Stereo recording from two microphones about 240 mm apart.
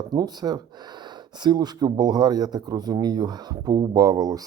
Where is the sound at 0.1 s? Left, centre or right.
Centre.